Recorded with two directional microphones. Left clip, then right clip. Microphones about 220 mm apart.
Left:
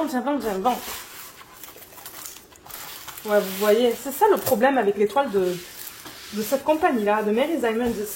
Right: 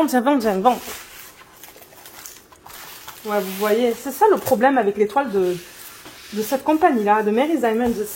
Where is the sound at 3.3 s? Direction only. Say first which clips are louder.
Left 1 dB; 30° right (ahead or behind).